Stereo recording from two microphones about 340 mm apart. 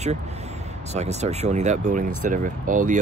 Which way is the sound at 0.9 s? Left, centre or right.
Centre.